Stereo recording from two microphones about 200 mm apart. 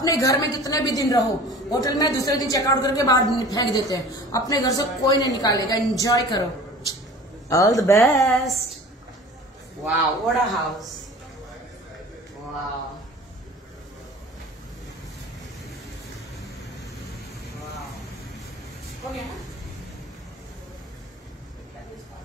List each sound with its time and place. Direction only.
0.0 s a woman's voice: 15° left (ahead or behind)
7.4 s a woman's voice: 15° left (ahead or behind)
8.0 s a man's voice: centre (ahead or behind)
9.8 s a man's voice: centre (ahead or behind)